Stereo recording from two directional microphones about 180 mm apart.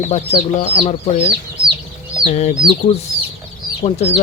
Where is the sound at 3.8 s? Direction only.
35° left (ahead or behind).